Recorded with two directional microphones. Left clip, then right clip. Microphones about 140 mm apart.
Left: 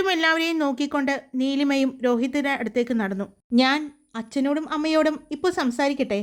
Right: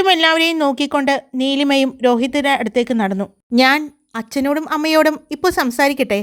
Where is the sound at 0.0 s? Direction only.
45° right (ahead or behind).